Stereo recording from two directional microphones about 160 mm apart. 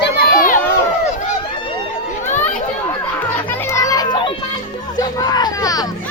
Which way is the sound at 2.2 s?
50° left (ahead or behind).